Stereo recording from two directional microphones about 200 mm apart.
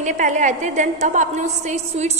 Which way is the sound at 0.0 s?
40° right (ahead or behind).